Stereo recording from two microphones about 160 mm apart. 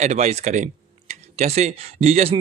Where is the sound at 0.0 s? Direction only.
45° right (ahead or behind).